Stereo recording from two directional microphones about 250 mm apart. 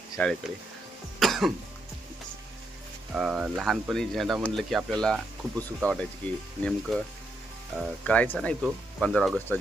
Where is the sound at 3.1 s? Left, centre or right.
Centre.